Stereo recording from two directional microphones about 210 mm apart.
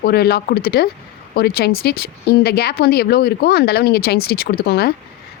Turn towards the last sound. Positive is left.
turn(degrees=50)  # may be behind; listen again after turning